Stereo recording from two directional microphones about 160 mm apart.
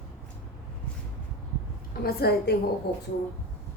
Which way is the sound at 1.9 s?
80° left.